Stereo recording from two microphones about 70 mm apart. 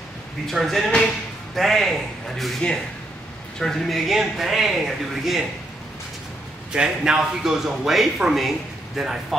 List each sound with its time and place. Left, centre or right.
0.5 s speech: centre
3.5 s a man's voice: centre
6.7 s a man's voice: centre